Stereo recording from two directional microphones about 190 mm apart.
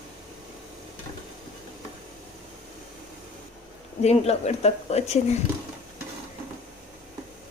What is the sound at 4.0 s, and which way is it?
Speech, 35° left (ahead or behind).